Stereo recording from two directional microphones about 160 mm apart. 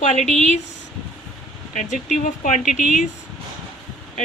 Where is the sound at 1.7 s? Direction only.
55° left (ahead or behind).